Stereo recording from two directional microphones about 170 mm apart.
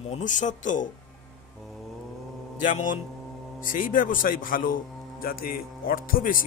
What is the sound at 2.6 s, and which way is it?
A man's voice, 50° left (ahead or behind).